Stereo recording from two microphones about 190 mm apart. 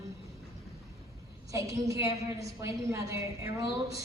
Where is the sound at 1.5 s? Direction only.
15° right (ahead or behind).